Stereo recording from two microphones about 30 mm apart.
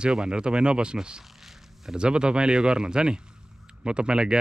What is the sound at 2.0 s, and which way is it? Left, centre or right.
Speech, right.